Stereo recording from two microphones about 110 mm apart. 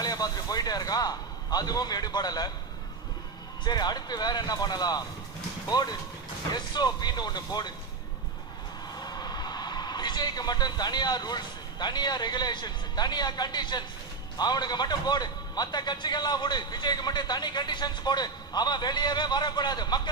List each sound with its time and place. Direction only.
0.0 s a man's voice: 35° left (ahead or behind)
3.6 s a man's voice: 40° left (ahead or behind)
9.0 s a man's voice: 40° left (ahead or behind)